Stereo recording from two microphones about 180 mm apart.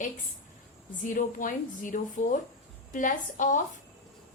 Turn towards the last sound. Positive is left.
turn(degrees=45)  # may be behind; listen again after turning